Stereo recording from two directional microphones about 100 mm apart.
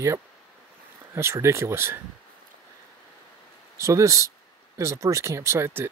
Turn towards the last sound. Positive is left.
turn(degrees=-25)  # may be behind; listen again after turning